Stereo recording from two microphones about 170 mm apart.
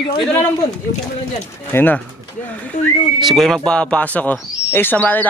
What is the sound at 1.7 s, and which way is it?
Speech, 10° left (ahead or behind).